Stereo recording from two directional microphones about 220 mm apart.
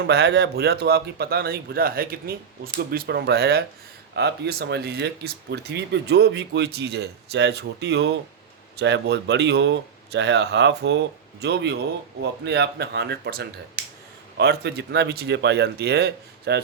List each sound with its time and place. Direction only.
0.0 s speech: 50° right (ahead or behind)
13.8 s a sound: 45° right (ahead or behind)
14.3 s speech: 50° right (ahead or behind)